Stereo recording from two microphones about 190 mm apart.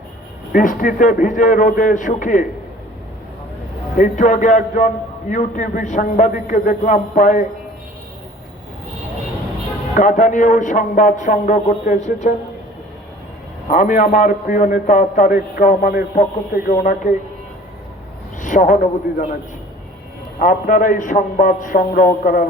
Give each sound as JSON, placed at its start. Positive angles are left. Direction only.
{"t": 0.5, "sound": "a man's voice", "side_deg": 45}
{"t": 3.9, "sound": "a man's voice", "side_deg": 45}
{"t": 9.9, "sound": "a man's voice", "side_deg": 40}
{"t": 13.7, "sound": "a man's voice", "side_deg": 40}
{"t": 18.3, "sound": "a man's voice", "side_deg": 40}
{"t": 20.4, "sound": "a man's voice", "side_deg": 45}